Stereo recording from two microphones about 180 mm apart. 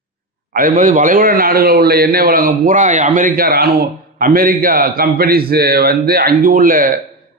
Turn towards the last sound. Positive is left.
turn(degrees=-50)  # may be behind; listen again after turning